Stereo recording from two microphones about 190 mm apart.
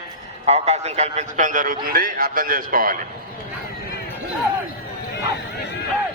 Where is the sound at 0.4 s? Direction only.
35° right (ahead or behind).